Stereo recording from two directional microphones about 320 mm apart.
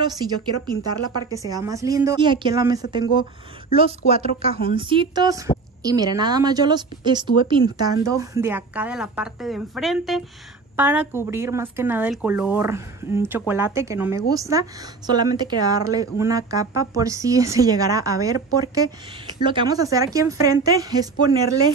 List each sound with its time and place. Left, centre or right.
0.0 s speech: centre
4.1 s a woman's voice: centre